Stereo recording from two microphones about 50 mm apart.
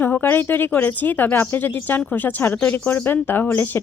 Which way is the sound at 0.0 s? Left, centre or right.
Left.